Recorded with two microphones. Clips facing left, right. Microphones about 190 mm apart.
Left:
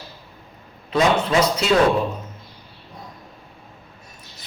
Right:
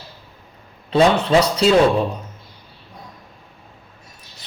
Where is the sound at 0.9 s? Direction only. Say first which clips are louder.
Right 4 dB; 30° right (ahead or behind).